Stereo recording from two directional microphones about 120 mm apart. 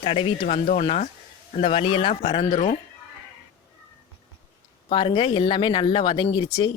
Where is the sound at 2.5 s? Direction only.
70° left (ahead or behind).